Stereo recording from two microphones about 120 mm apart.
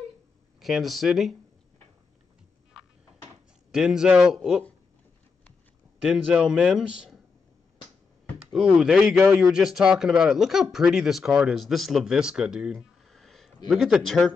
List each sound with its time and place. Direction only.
0.6 s speech: centre (ahead or behind)
3.7 s speech: 5° right (ahead or behind)
6.0 s speech: 5° right (ahead or behind)
8.5 s speech: 5° right (ahead or behind)